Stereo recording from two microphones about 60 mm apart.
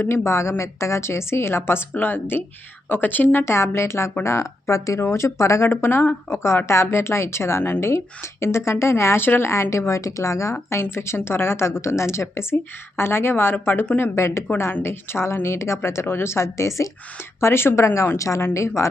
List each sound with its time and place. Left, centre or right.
0.0 s a woman's voice: left
3.4 s a woman's voice: left
9.2 s a woman's voice: left
9.5 s a woman's voice: left
17.4 s a woman's voice: left